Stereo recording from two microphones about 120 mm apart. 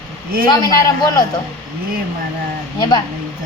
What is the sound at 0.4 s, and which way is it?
Speech, 35° left (ahead or behind).